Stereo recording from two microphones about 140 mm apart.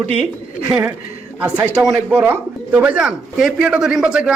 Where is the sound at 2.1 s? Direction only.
15° right (ahead or behind).